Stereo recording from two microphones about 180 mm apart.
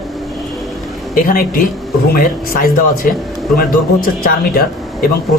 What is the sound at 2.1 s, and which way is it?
Speech, 50° left (ahead or behind).